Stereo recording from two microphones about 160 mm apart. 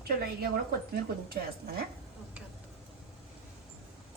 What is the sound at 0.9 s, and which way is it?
Speech, 75° right (ahead or behind).